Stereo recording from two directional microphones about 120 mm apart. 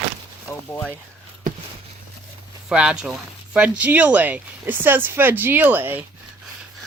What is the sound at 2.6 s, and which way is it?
Speech, 5° right (ahead or behind).